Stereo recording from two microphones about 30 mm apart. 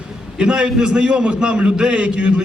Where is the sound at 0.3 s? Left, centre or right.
Right.